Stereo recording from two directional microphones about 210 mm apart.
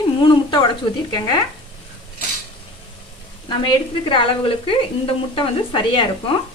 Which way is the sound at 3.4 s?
20° left (ahead or behind).